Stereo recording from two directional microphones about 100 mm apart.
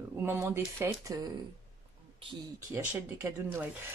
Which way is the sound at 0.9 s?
40° right (ahead or behind).